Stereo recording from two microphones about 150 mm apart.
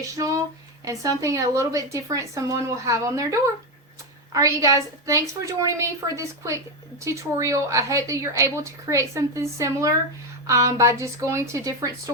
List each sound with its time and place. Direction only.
0.1 s speech: 20° right (ahead or behind)